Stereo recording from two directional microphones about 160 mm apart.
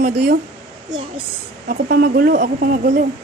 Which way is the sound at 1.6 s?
65° right (ahead or behind).